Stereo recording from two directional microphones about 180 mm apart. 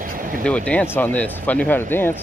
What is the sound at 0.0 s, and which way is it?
Vehicle, 50° right (ahead or behind).